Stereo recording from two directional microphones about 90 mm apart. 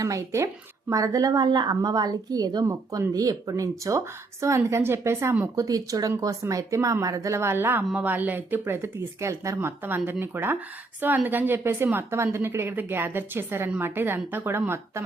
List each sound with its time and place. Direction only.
0.0 s speech: 35° right (ahead or behind)
5.5 s speech: 40° right (ahead or behind); by 14.6 s 25° right (ahead or behind)